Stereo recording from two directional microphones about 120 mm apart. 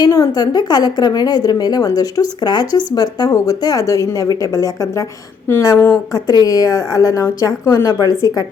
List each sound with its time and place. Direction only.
0.0 s a woman's voice: 30° left (ahead or behind)